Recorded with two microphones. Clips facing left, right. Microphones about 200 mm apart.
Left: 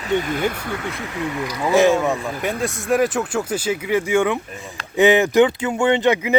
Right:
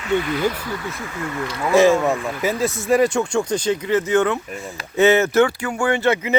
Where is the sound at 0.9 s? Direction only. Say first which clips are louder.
Left 2 dB; 20° left (ahead or behind).